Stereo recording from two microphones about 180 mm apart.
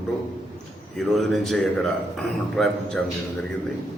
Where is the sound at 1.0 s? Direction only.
Centre (ahead or behind).